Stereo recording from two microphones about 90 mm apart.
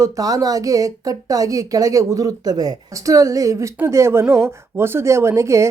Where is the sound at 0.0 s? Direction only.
40° right (ahead or behind).